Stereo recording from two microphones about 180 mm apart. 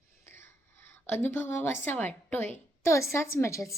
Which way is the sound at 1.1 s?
15° left (ahead or behind).